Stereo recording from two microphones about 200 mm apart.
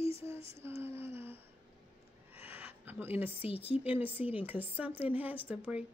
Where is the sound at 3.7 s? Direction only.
10° right (ahead or behind).